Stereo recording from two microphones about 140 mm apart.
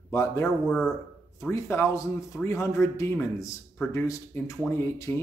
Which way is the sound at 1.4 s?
20° left (ahead or behind).